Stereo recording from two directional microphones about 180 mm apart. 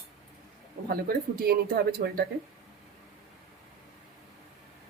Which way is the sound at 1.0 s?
55° right (ahead or behind).